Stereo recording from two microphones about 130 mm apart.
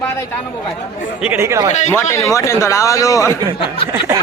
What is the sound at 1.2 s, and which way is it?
Speech, 15° right (ahead or behind).